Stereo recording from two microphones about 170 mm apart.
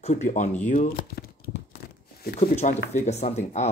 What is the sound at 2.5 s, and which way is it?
Speech, 45° left (ahead or behind).